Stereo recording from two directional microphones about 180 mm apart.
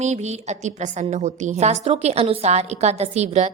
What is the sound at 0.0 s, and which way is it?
A woman's voice, 40° right (ahead or behind).